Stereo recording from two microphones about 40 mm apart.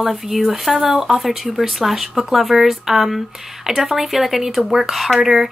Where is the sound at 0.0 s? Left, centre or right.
Centre.